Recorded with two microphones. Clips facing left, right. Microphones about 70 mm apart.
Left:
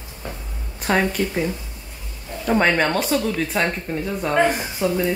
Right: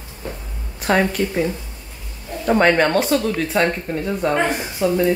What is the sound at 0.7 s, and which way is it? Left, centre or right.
Speech, centre.